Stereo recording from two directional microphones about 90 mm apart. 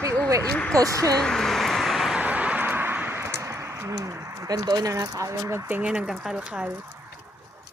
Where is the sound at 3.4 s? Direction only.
35° right (ahead or behind).